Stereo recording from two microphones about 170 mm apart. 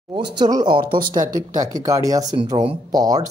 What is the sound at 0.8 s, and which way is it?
Speech, 60° right (ahead or behind).